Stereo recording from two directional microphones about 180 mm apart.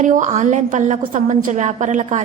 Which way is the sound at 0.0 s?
45° right (ahead or behind).